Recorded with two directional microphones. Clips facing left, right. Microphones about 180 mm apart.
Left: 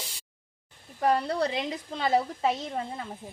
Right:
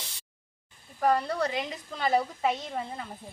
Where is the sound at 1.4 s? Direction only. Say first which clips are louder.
Left 2 dB; 25° left (ahead or behind).